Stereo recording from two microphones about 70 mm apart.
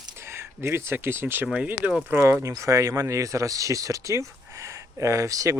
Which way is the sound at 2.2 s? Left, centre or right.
Right.